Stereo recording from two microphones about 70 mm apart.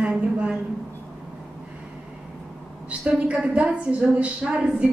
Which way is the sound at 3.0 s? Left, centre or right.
Centre.